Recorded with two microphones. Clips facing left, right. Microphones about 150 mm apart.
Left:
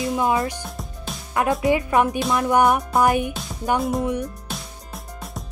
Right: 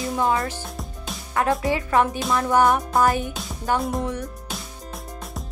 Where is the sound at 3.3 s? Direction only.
Centre (ahead or behind).